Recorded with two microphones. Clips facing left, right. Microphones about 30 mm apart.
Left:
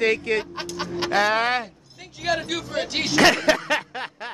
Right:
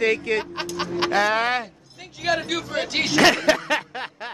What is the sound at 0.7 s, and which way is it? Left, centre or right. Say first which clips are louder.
Music: right 3 dB; centre.